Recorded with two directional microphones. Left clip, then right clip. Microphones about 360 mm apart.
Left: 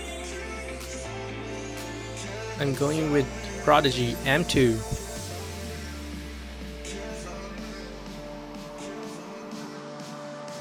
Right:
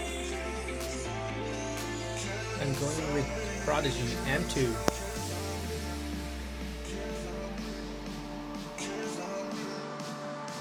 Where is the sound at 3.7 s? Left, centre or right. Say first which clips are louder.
Left 10 dB; left.